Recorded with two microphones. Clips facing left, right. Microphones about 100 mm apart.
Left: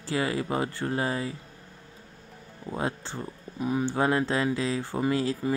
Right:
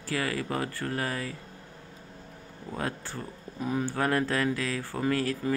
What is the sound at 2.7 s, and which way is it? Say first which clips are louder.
Speech: left 3 dB; 20° left (ahead or behind).